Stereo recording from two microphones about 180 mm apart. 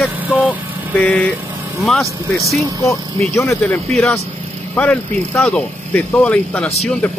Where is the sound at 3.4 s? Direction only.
15° left (ahead or behind).